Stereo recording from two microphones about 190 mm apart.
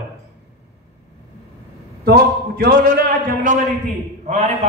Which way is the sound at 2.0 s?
55° right (ahead or behind).